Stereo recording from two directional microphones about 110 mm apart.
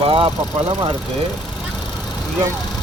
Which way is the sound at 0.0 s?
55° right (ahead or behind).